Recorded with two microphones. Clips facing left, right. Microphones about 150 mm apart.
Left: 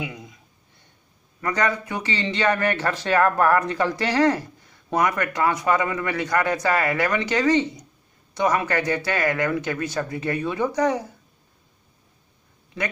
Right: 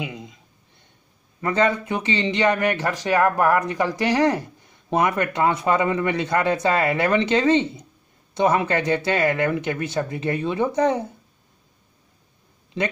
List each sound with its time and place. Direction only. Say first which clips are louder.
0.0 s speech: right 1 dB; 20° right (ahead or behind)
1.4 s speech: right 3 dB; 25° right (ahead or behind)